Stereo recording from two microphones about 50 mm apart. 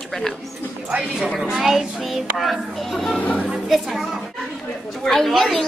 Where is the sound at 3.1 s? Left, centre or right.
Left.